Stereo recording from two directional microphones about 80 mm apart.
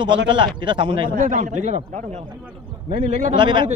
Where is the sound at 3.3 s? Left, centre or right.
Right.